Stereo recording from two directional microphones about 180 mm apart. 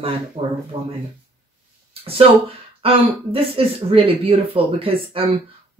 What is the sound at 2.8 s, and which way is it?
Speech, 30° right (ahead or behind).